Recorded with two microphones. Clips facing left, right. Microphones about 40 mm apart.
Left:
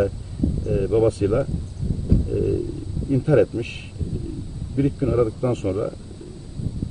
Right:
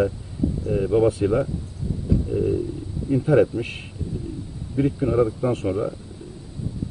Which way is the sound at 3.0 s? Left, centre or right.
Centre.